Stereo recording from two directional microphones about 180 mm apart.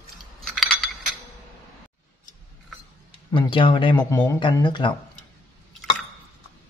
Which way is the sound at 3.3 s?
30° left (ahead or behind).